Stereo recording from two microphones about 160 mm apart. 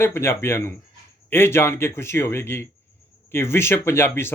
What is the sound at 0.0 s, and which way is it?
Speech, 15° left (ahead or behind).